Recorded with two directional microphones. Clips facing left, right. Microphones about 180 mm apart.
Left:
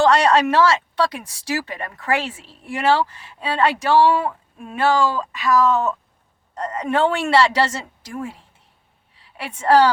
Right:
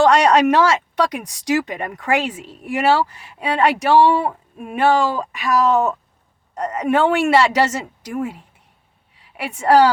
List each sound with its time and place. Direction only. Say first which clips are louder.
0.0 s a woman's voice: right 2 dB; 15° right (ahead or behind)